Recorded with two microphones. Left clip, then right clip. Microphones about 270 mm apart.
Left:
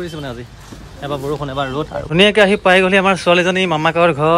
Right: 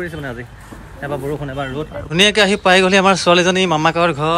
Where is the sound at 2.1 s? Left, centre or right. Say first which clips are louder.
Left 2 dB; centre.